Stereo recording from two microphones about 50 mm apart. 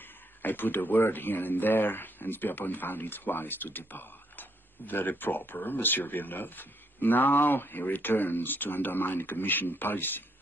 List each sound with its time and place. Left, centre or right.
0.4 s speech: left